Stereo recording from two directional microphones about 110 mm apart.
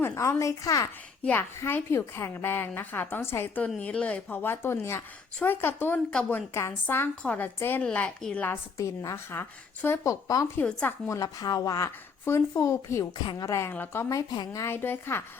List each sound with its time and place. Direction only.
0.1 s a woman's voice: 30° left (ahead or behind)
1.2 s a woman's voice: 20° left (ahead or behind)
6.5 s a woman's voice: 25° left (ahead or behind)
8.4 s a woman's voice: 30° left (ahead or behind)
10.6 s speech: 15° left (ahead or behind)
11.1 s a woman's voice: 35° left (ahead or behind)
14.2 s a woman's voice: 35° left (ahead or behind)